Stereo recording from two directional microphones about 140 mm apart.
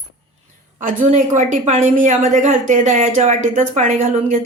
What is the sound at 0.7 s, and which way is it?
Speech, 65° right (ahead or behind).